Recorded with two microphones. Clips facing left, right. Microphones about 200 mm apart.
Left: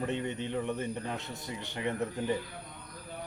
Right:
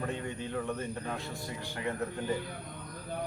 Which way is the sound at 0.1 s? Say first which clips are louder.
Left 3 dB; 20° left (ahead or behind).